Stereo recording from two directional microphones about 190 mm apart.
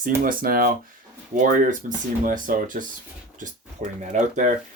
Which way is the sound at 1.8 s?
45° right (ahead or behind).